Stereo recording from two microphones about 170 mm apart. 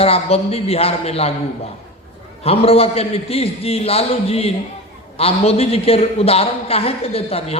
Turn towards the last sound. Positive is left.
turn(degrees=35)  # may be behind; listen again after turning